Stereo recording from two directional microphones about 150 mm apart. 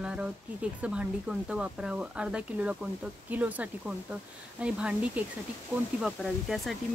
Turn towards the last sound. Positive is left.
turn(degrees=0)  # may be behind; listen again after turning